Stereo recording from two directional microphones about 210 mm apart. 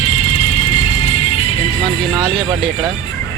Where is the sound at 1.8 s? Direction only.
25° right (ahead or behind).